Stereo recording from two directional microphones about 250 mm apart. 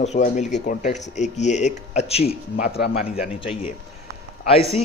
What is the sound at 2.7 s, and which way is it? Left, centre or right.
Speech, left.